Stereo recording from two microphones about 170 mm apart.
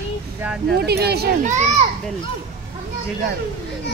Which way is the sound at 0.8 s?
70° right (ahead or behind).